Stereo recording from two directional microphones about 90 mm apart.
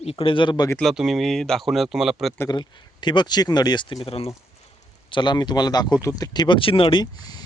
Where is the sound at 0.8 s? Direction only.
5° right (ahead or behind).